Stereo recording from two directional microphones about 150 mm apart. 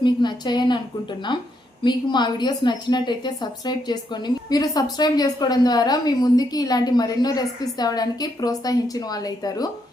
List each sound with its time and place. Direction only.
0.0 s a woman's voice: 30° left (ahead or behind)
1.8 s a woman's voice: 30° left (ahead or behind)